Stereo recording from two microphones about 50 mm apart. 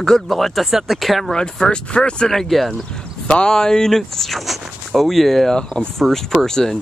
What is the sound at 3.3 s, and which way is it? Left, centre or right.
Speech, centre.